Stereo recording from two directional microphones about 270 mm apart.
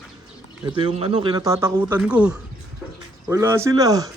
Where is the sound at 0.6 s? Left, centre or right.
Right.